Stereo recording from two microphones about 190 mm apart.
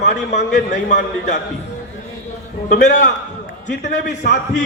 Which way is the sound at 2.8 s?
40° left (ahead or behind).